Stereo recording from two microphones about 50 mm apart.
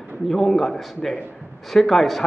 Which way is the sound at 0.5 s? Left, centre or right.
Centre.